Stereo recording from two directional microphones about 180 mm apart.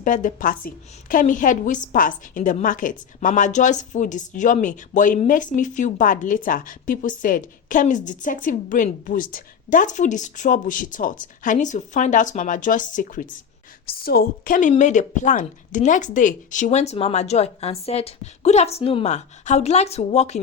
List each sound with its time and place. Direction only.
0.0 s speech: 45° left (ahead or behind)
13.8 s a woman's voice: 60° left (ahead or behind); by 20.4 s 40° left (ahead or behind)